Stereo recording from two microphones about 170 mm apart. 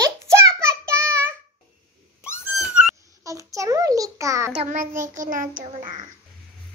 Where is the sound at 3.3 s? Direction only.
20° right (ahead or behind).